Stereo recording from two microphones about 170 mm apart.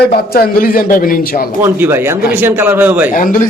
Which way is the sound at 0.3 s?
55° left (ahead or behind).